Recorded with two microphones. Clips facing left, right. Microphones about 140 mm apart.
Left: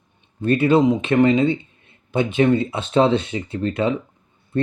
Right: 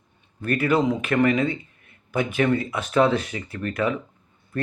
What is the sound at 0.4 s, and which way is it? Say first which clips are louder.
Speech: left 5 dB; 25° left (ahead or behind).